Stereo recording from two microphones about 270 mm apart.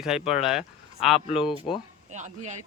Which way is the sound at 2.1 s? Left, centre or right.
Right.